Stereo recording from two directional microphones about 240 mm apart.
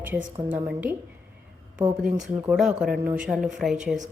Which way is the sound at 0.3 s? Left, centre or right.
Centre.